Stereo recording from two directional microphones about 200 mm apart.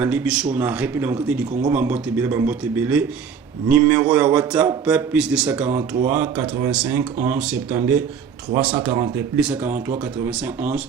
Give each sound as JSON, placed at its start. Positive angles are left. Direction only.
{"t": 0.0, "sound": "speech", "side_deg": -10}